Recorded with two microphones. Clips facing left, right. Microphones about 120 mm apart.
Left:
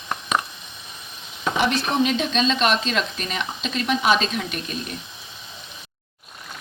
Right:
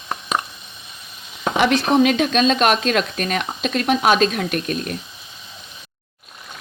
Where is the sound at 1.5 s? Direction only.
70° right (ahead or behind); by 4.9 s 55° right (ahead or behind).